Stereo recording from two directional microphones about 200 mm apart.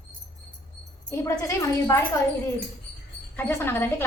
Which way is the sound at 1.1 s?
15° left (ahead or behind).